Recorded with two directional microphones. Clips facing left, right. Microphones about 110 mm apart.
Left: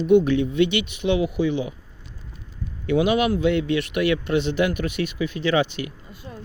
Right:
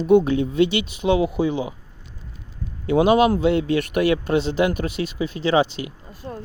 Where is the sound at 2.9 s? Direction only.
35° right (ahead or behind).